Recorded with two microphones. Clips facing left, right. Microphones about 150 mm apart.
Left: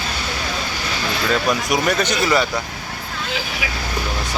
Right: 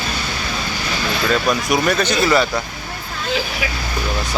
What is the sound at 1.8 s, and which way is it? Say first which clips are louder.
Speech: right 2 dB; 15° left (ahead or behind).